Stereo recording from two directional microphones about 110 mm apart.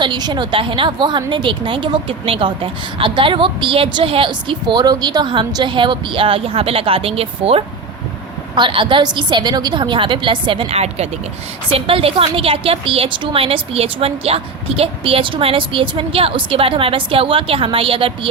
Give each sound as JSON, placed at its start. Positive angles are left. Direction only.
{"t": 0.0, "sound": "a woman's voice", "side_deg": -40}
{"t": 8.5, "sound": "a woman's voice", "side_deg": -50}
{"t": 10.8, "sound": "speech", "side_deg": -75}
{"t": 11.7, "sound": "a woman's voice", "side_deg": -55}